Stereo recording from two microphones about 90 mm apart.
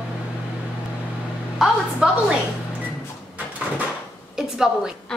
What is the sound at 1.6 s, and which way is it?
Speech, 5° right (ahead or behind).